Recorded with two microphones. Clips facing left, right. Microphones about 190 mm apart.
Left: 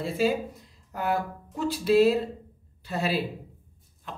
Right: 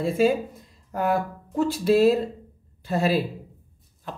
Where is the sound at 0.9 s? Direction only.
45° right (ahead or behind).